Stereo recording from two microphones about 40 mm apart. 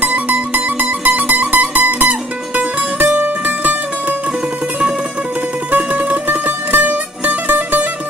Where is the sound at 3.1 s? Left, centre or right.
Right.